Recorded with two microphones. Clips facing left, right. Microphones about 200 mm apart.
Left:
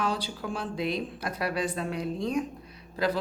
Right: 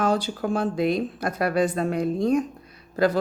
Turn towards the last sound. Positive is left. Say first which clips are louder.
# right 6 dB
turn(degrees=-50)  # may be behind; listen again after turning